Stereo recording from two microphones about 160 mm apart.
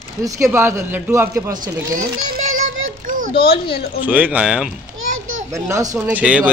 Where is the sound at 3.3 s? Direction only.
75° left (ahead or behind).